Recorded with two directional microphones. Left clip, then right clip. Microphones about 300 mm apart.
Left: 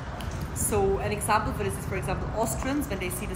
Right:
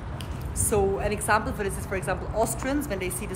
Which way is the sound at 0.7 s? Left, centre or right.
Centre.